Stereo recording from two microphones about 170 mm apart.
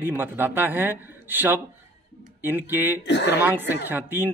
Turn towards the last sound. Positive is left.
turn(degrees=-10)  # may be behind; listen again after turning